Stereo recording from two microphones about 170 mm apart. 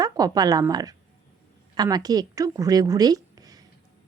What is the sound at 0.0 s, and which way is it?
A woman's voice, 20° right (ahead or behind).